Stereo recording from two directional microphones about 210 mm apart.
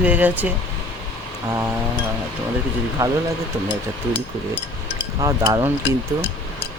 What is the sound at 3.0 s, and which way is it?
Speech, 15° right (ahead or behind).